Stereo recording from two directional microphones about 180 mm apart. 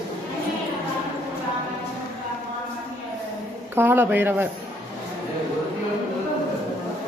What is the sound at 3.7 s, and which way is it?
Speech, 10° right (ahead or behind).